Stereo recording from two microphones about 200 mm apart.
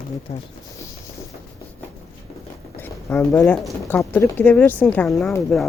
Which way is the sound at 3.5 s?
5° left (ahead or behind).